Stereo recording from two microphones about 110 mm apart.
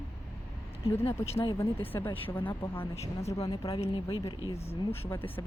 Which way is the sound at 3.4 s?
55° left (ahead or behind).